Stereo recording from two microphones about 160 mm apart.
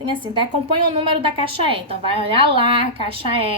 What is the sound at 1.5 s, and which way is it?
A woman's voice, 35° right (ahead or behind).